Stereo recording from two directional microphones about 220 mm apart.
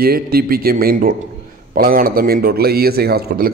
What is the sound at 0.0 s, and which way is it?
A man's voice, 45° right (ahead or behind).